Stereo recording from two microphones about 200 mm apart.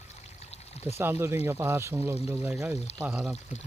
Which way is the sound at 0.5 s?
30° left (ahead or behind).